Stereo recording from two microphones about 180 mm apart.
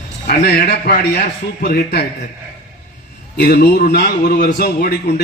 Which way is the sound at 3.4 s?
60° left (ahead or behind).